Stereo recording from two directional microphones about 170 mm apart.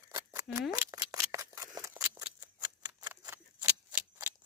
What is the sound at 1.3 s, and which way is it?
Scissors, 20° right (ahead or behind).